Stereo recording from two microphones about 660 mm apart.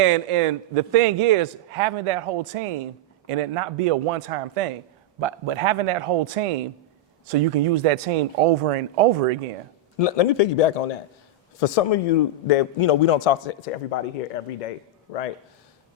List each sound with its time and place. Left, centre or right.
0.0 s a man's voice: right
5.2 s a man's voice: right
10.0 s a man's voice: left
14.4 s speech: left
15.1 s a man's voice: left